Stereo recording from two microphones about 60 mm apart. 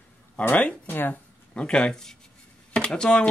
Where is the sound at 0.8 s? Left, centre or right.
Left.